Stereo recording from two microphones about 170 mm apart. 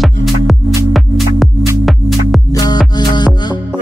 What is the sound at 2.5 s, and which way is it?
Music, 20° left (ahead or behind).